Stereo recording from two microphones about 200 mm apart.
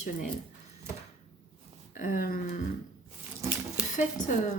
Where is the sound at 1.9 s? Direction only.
40° left (ahead or behind).